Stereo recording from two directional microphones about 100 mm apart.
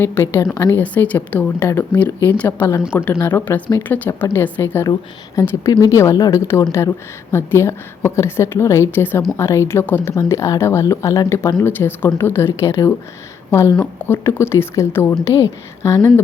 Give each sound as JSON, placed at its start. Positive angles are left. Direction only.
{"t": 0.0, "sound": "a woman's voice", "side_deg": 20}
{"t": 0.8, "sound": "a woman's voice", "side_deg": 15}
{"t": 1.5, "sound": "a woman's voice", "side_deg": 25}
{"t": 1.9, "sound": "a woman's voice", "side_deg": 15}